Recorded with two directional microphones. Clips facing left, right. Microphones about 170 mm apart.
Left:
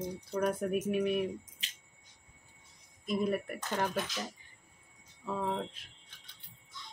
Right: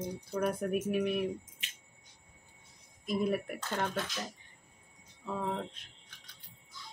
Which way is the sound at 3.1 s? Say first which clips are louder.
Even; centre (ahead or behind).